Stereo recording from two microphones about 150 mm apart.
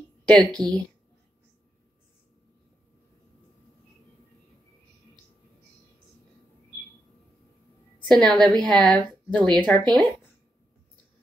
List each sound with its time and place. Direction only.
0.2 s a sound: 5° left (ahead or behind)
0.5 s speech: 25° right (ahead or behind)
8.1 s speech: centre (ahead or behind)